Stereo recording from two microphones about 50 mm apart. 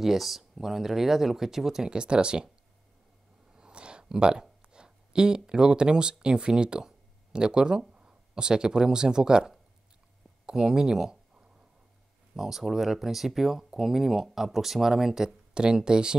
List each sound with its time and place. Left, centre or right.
0.0 s speech: centre
3.5 s speech: centre